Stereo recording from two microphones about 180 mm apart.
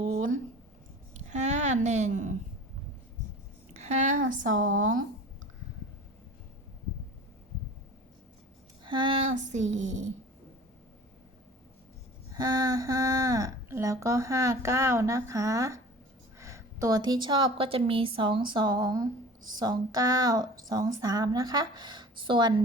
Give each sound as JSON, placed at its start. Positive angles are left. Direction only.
{"t": 1.1, "sound": "a sound", "side_deg": -40}
{"t": 3.8, "sound": "speech", "side_deg": -40}
{"t": 4.5, "sound": "speech", "side_deg": -90}
{"t": 8.8, "sound": "a sound", "side_deg": -25}
{"t": 9.3, "sound": "speech", "side_deg": -40}
{"t": 12.3, "sound": "a woman's voice", "side_deg": -20}